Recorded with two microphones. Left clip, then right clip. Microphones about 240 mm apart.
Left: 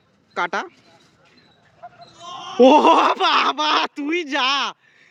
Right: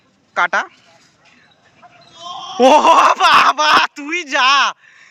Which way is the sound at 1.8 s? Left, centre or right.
Left.